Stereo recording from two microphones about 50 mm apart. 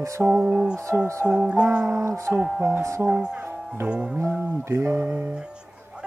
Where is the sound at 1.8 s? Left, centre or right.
Right.